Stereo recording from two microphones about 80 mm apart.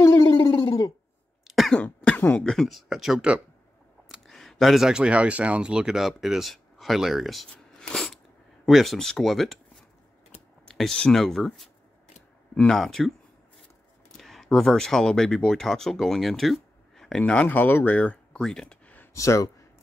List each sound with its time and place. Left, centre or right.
0.0 s a sound: left
0.5 s a sound: left
1.5 s cough: centre
1.8 s cough: centre
2.4 s speech: centre
4.3 s speech: centre
10.7 s speech: centre
14.1 s speech: centre
17.2 s speech: centre
19.1 s speech: left